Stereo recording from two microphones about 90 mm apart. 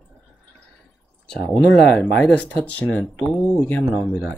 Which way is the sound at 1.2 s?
10° left (ahead or behind).